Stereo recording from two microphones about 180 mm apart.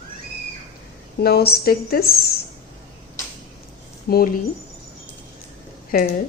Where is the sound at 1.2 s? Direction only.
60° left (ahead or behind).